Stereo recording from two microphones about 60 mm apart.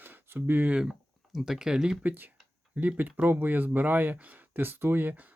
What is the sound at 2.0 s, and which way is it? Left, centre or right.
Speech, right.